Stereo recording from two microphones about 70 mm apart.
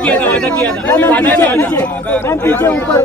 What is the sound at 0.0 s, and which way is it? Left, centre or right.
Speech, centre.